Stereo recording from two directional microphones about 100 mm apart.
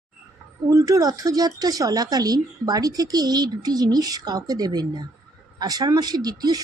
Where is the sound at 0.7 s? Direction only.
35° right (ahead or behind).